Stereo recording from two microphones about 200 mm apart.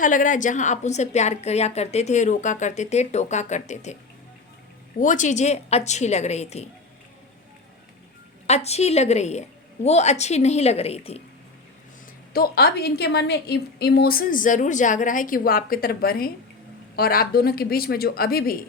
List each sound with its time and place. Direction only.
0.0 s a woman's voice: 40° left (ahead or behind)
4.9 s a woman's voice: 40° left (ahead or behind)
8.4 s a woman's voice: 35° left (ahead or behind)
12.3 s a woman's voice: 50° left (ahead or behind)